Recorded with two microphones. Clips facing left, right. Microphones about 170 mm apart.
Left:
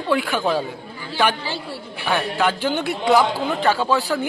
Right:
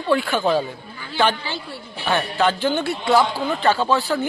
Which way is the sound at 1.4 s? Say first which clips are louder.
Left 2 dB; 35° left (ahead or behind).